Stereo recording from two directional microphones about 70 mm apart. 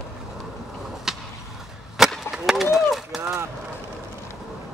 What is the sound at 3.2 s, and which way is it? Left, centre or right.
Honk, right.